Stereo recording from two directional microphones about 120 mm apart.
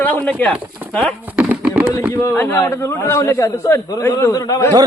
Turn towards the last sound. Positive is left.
turn(degrees=25)  # may be behind; listen again after turning